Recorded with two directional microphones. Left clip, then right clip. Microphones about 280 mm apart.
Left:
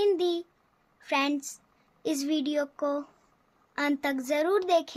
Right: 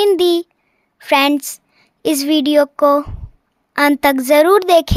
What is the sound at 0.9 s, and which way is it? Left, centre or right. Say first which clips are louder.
A woman's voice: right 15 dB; right.